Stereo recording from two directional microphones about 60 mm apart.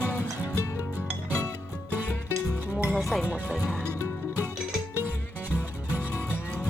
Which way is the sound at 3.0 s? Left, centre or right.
Centre.